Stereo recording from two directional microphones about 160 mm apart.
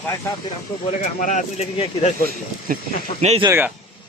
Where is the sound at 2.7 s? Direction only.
60° right (ahead or behind).